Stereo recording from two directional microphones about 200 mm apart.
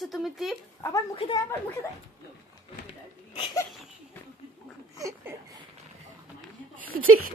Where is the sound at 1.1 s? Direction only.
20° left (ahead or behind).